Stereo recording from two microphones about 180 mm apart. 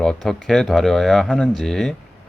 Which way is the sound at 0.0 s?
5° left (ahead or behind).